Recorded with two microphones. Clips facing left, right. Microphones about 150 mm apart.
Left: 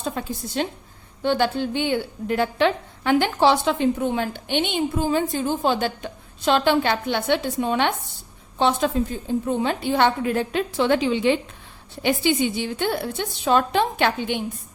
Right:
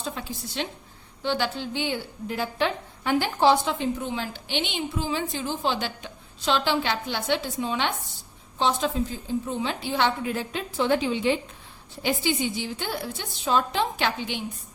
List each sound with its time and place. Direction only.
0.0 s a woman's voice: 50° left (ahead or behind); by 11.3 s 75° left (ahead or behind)
12.0 s a woman's voice: 60° left (ahead or behind)